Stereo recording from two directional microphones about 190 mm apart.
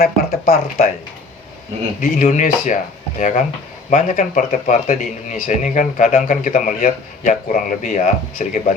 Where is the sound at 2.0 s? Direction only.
40° left (ahead or behind).